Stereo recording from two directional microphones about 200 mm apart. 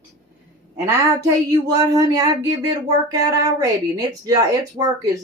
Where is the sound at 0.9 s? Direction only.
15° right (ahead or behind).